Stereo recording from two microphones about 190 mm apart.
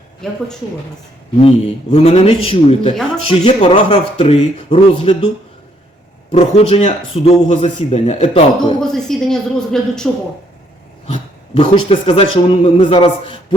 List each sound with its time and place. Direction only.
0.2 s a woman's voice: 5° left (ahead or behind)
1.4 s a man's voice: 35° left (ahead or behind)
6.3 s a man's voice: 30° left (ahead or behind)
8.8 s a woman's voice: centre (ahead or behind)
11.0 s a man's voice: 30° left (ahead or behind)